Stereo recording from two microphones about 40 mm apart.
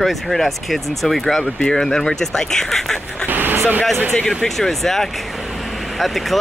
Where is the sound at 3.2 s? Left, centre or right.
Right.